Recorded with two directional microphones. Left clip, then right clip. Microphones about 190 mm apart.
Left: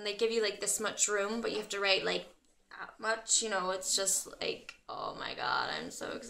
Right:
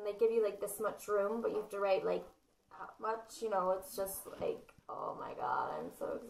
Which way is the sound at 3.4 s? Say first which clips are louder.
Left 1 dB; 25° left (ahead or behind).